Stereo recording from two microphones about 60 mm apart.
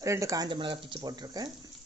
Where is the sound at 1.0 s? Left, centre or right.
Right.